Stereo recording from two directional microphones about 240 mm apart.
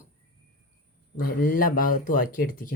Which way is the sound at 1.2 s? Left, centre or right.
Left.